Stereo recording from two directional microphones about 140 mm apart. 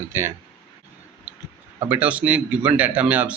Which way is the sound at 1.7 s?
10° right (ahead or behind).